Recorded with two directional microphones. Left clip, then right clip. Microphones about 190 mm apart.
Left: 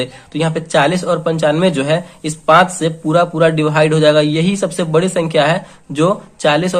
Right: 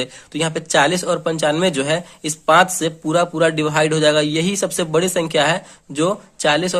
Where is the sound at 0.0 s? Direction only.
35° right (ahead or behind).